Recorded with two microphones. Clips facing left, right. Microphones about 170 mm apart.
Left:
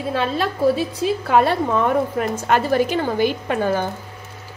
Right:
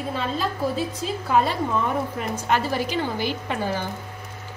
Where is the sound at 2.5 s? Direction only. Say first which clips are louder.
Left 6 dB; 55° left (ahead or behind).